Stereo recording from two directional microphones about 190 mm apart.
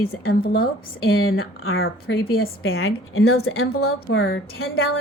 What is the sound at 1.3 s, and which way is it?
A woman's voice, 90° left.